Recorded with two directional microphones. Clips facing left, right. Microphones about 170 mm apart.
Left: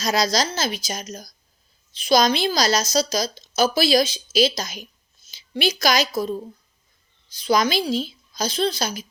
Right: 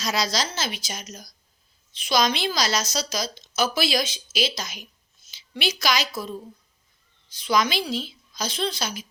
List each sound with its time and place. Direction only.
0.0 s a woman's voice: 40° left (ahead or behind)
7.3 s a woman's voice: 40° left (ahead or behind)